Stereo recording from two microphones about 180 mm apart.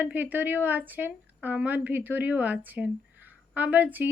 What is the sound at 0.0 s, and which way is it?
A woman's voice, 10° right (ahead or behind).